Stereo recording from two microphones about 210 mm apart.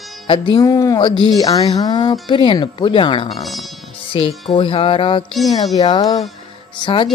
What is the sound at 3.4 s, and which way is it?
Speech, centre (ahead or behind).